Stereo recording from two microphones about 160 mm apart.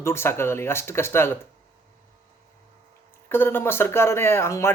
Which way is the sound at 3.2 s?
15° left (ahead or behind).